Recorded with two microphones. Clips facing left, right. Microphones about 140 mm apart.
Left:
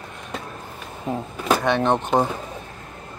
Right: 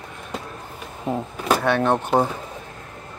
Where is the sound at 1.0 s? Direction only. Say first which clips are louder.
Even; 5° right (ahead or behind).